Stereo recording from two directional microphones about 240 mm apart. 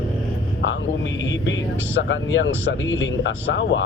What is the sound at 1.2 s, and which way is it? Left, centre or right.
Speech, left.